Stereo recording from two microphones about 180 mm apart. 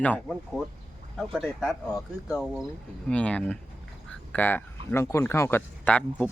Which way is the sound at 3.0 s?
5° left (ahead or behind).